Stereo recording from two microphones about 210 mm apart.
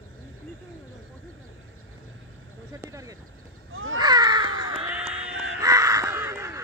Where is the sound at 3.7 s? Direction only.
70° right (ahead or behind).